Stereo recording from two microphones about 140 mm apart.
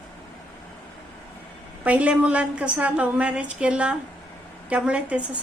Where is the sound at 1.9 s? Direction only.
10° right (ahead or behind).